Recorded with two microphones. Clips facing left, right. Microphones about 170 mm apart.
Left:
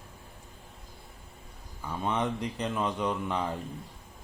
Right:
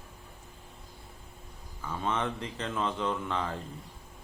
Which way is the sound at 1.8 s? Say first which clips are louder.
Left 2 dB; 15° left (ahead or behind).